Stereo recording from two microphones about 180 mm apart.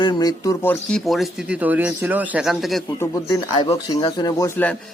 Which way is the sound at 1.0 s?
Centre (ahead or behind).